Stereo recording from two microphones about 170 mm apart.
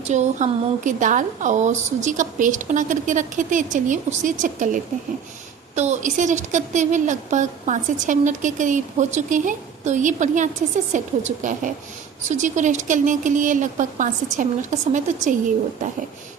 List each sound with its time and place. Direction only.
0.1 s a woman's voice: 45° right (ahead or behind)